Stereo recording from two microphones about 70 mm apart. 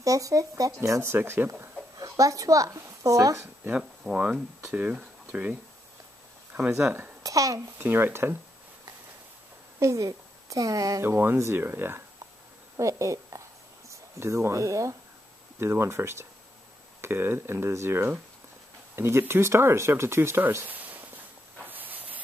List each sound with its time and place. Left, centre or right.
0.0 s speech: right
1.0 s speech: right
2.0 s speech: right
3.7 s speech: centre
7.2 s speech: right
7.8 s speech: right
9.8 s a woman's voice: right
11.0 s speech: right
12.7 s a woman's voice: right
15.6 s speech: right
21.6 s a sound: right